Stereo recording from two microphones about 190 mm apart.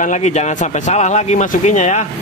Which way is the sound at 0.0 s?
40° left (ahead or behind).